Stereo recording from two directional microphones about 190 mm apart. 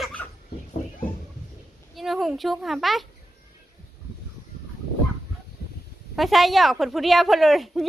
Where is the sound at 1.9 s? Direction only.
Centre (ahead or behind).